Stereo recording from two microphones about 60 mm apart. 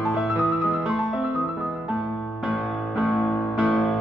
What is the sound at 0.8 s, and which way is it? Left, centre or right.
Music, centre.